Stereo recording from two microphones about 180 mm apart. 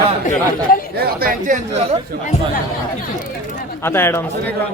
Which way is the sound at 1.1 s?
50° right (ahead or behind).